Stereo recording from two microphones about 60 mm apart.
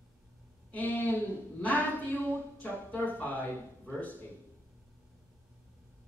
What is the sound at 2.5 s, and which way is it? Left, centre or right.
Speech, left.